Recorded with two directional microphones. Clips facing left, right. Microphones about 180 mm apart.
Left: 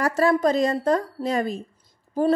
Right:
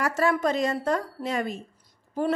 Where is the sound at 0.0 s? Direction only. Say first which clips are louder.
Left 4 dB; 35° left (ahead or behind).